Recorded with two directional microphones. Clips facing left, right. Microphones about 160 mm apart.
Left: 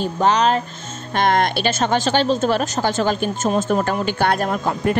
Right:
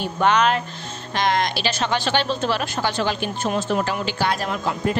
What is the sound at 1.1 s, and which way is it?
A woman's voice, 55° left (ahead or behind).